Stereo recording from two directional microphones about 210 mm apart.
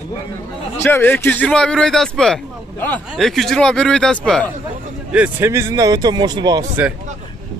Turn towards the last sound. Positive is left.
turn(degrees=-20)  # may be behind; listen again after turning